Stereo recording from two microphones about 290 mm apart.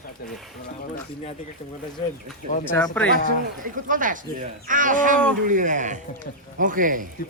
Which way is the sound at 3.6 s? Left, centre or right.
Right.